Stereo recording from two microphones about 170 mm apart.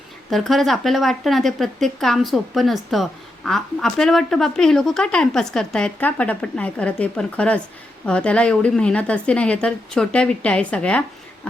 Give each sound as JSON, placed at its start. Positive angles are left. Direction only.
{"t": 0.3, "sound": "a woman's voice", "side_deg": 0}